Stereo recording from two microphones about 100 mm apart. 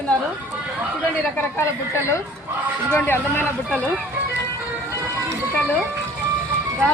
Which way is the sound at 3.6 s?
10° left (ahead or behind).